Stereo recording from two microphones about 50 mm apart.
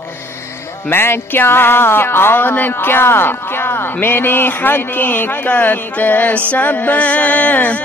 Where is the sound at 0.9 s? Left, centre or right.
Left.